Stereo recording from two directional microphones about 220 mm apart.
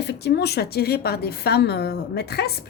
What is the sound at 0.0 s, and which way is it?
A woman's voice, 50° left (ahead or behind).